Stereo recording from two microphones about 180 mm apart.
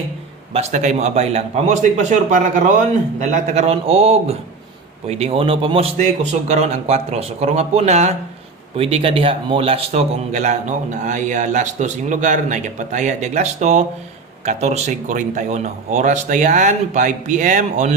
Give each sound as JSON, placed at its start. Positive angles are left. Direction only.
{"t": 0.5, "sound": "a man's voice", "side_deg": -40}